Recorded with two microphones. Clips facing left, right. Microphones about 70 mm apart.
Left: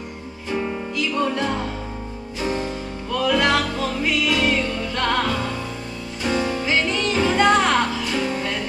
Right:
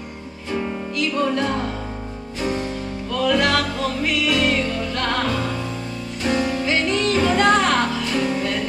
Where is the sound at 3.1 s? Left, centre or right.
Centre.